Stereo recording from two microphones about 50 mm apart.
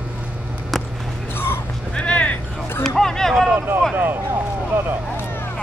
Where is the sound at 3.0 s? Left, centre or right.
Centre.